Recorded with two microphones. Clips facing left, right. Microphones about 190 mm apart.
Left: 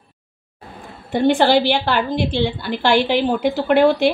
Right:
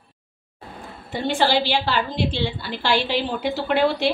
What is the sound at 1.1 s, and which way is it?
A woman's voice, 55° left (ahead or behind).